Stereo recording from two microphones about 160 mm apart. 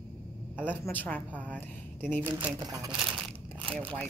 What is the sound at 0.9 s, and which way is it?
A woman's voice, 10° left (ahead or behind).